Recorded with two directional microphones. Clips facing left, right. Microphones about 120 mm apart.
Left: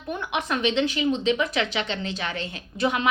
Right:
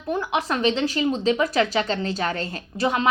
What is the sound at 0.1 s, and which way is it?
Speech, 35° right (ahead or behind).